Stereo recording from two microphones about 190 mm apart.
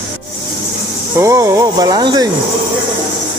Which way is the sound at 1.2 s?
15° right (ahead or behind).